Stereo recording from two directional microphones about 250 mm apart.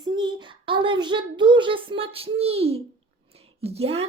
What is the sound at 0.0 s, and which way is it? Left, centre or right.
A child's voice, centre.